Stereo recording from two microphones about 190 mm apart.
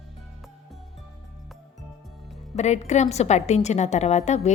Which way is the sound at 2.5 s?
35° left (ahead or behind).